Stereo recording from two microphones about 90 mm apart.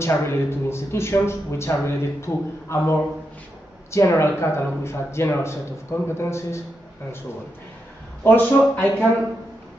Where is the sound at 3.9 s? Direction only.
30° left (ahead or behind).